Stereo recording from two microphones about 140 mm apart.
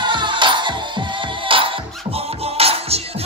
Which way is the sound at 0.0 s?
35° right (ahead or behind).